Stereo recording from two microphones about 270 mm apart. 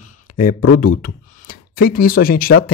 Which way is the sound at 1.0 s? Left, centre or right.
Left.